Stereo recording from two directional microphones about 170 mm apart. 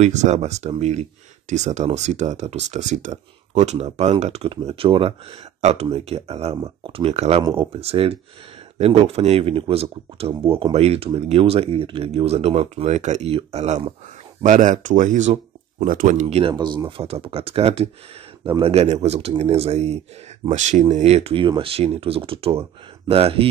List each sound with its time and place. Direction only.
0.0 s speech: 45° right (ahead or behind)
16.5 s speech: 25° right (ahead or behind)